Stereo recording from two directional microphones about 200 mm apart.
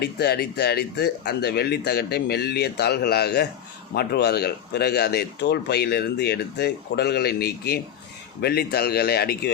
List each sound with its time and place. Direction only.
0.0 s speech: 55° left (ahead or behind)